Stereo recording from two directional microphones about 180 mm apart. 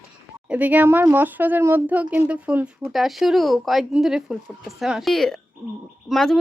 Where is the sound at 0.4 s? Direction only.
5° right (ahead or behind).